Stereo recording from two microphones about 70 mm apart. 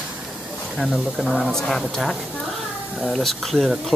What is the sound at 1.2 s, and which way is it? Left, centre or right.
Speech, centre.